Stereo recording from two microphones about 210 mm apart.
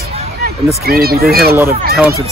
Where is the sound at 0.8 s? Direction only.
45° right (ahead or behind).